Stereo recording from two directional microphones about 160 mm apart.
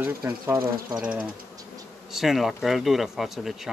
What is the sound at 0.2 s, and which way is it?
Speech, 20° right (ahead or behind).